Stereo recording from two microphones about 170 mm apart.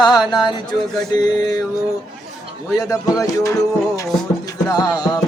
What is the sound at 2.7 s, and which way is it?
Music, 20° left (ahead or behind).